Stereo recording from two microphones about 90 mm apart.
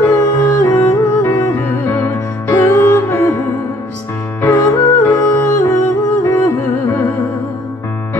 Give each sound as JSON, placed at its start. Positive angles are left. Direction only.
{"t": 0.0, "sound": "music", "side_deg": 35}
{"t": 5.0, "sound": "music", "side_deg": 25}